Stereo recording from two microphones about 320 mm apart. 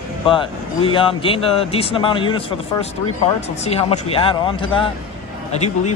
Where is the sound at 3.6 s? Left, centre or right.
Centre.